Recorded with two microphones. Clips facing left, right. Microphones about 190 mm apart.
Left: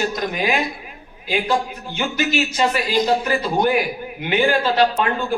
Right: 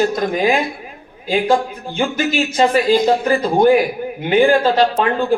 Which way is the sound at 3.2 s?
45° right (ahead or behind).